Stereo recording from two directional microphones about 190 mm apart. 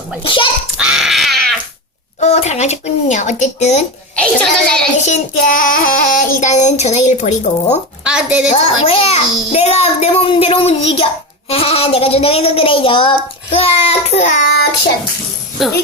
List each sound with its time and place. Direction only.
0.2 s a child's voice: 25° left (ahead or behind)
0.8 s a sound: 5° right (ahead or behind)
2.2 s a child's voice: 35° left (ahead or behind)
4.1 s a child's voice: 5° left (ahead or behind)
5.0 s a child's voice: 40° left (ahead or behind)
8.0 s a woman's voice: 5° right (ahead or behind)
8.9 s a child's voice: 30° left (ahead or behind)
15.6 s a woman's voice: centre (ahead or behind)